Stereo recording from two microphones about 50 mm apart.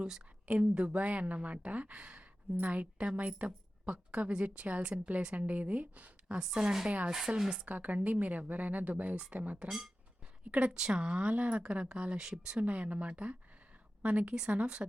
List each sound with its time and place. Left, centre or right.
0.4 s a woman's voice: right
6.2 s a woman's voice: centre
7.6 s a woman's voice: right
9.6 s a woman's voice: centre
12.5 s a woman's voice: right